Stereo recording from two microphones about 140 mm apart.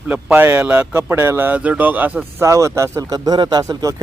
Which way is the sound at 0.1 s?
10° right (ahead or behind).